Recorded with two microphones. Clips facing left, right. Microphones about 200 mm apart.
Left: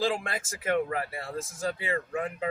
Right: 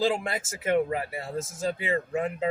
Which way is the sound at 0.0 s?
25° right (ahead or behind).